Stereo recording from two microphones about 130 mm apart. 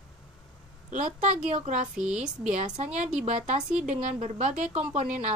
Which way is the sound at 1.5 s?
60° right (ahead or behind).